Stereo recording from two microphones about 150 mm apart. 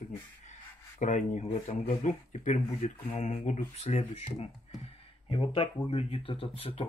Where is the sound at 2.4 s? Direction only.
55° left (ahead or behind).